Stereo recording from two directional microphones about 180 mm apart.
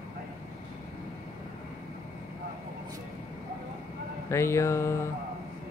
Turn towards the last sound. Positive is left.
turn(degrees=15)  # may be behind; listen again after turning